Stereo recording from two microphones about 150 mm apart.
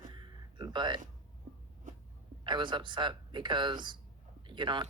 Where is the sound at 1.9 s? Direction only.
55° right (ahead or behind).